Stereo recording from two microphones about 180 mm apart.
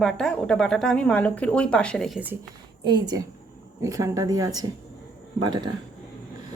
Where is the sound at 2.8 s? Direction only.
25° right (ahead or behind).